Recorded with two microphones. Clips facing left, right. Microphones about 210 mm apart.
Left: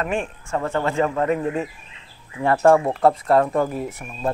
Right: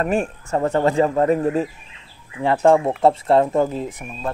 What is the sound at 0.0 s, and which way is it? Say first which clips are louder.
Speech: right 4 dB; 40° right (ahead or behind).